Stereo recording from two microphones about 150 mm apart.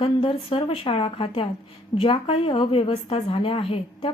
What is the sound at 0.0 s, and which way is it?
A woman's voice, 35° left (ahead or behind).